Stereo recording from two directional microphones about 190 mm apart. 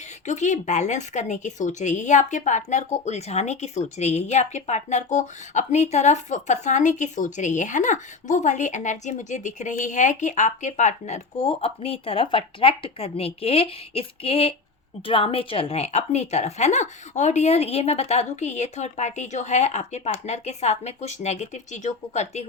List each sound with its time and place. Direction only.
0.3 s speech: 40° left (ahead or behind)